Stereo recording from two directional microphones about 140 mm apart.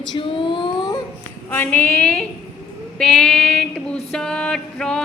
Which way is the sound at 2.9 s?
5° left (ahead or behind).